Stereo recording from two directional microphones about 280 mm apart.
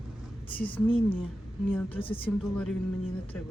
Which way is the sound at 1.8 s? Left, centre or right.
Centre.